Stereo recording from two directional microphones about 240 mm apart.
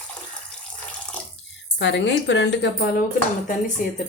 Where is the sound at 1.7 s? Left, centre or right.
Left.